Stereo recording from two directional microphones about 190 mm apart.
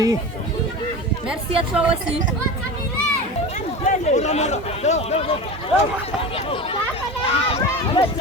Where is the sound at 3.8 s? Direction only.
35° left (ahead or behind).